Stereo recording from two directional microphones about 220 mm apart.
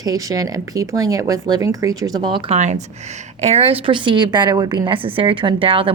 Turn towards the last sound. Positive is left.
turn(degrees=-25)  # may be behind; listen again after turning